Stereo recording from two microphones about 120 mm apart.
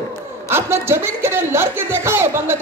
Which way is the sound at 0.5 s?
20° right (ahead or behind).